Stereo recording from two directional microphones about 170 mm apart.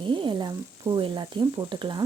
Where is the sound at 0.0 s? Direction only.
30° right (ahead or behind).